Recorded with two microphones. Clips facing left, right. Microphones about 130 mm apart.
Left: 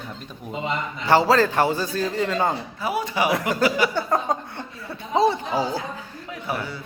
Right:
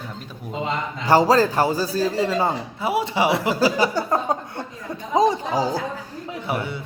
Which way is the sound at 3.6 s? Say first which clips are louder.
Right 1 dB; 35° right (ahead or behind).